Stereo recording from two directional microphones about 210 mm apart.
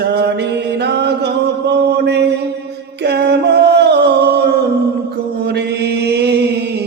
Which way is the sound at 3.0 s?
50° right (ahead or behind).